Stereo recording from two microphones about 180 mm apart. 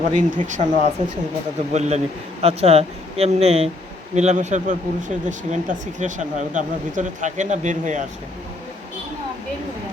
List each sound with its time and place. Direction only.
0.1 s speech: 45° right (ahead or behind)